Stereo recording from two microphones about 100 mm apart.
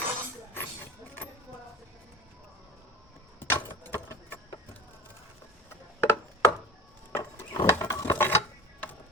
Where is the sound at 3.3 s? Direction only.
25° left (ahead or behind).